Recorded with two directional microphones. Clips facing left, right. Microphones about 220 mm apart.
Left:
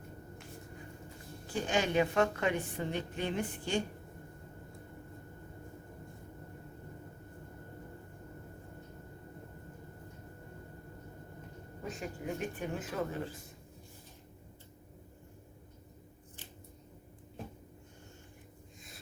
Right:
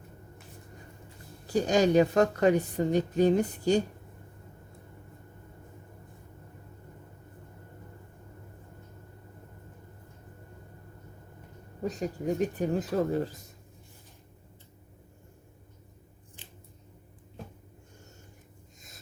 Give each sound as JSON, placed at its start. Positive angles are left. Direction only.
{"t": 1.5, "sound": "a woman's voice", "side_deg": -40}
{"t": 11.8, "sound": "a woman's voice", "side_deg": -40}